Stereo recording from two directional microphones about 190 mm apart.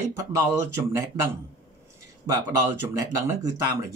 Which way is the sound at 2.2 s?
15° right (ahead or behind).